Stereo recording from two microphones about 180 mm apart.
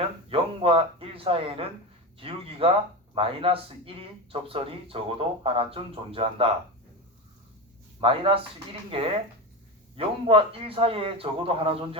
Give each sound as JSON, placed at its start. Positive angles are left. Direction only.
{"t": 0.3, "sound": "speech", "side_deg": -30}
{"t": 8.0, "sound": "speech", "side_deg": -30}
{"t": 10.0, "sound": "speech", "side_deg": -30}